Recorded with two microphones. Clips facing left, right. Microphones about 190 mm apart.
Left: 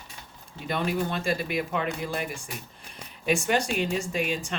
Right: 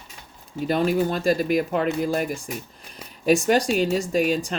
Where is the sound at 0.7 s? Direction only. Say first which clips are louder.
Right 6 dB; 40° right (ahead or behind).